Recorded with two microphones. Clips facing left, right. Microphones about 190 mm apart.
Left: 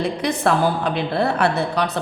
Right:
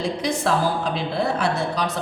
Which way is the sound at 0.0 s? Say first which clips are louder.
Left 3 dB; 60° left (ahead or behind).